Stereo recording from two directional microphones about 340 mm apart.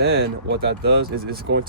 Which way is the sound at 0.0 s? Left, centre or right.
Right.